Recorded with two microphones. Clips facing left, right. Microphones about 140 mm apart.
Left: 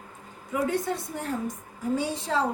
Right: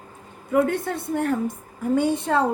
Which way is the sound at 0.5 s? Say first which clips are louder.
Right 6 dB; 55° right (ahead or behind).